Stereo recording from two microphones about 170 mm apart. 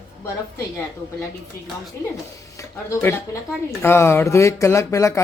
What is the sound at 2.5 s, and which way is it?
Speech, 15° left (ahead or behind).